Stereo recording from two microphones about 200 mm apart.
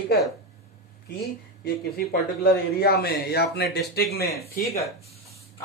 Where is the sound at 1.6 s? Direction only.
45° left (ahead or behind).